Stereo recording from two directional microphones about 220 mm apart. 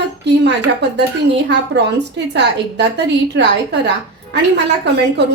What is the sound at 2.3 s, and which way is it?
A woman's voice, 50° right (ahead or behind).